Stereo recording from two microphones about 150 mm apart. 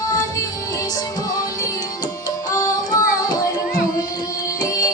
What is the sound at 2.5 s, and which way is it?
Carnatic music, 25° left (ahead or behind).